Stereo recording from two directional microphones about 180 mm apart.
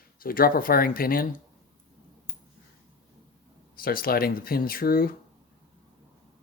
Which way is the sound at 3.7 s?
55° left (ahead or behind).